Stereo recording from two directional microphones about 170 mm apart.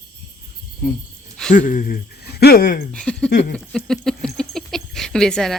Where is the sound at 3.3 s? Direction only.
90° left.